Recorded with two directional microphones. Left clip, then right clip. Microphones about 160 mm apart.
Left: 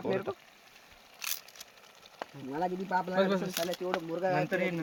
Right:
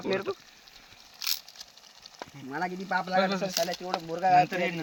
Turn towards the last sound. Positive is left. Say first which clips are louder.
# right 1 dB
turn(degrees=10)  # may be behind; listen again after turning